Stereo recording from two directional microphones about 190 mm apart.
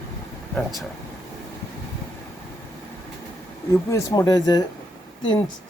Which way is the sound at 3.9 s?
20° left (ahead or behind).